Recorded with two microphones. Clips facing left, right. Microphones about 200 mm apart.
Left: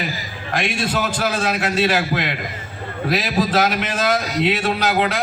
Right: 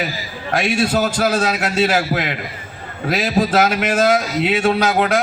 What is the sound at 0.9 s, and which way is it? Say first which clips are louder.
A man's voice: right 4 dB; 40° right (ahead or behind).